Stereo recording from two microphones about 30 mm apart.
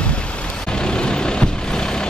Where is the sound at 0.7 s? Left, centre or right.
Left.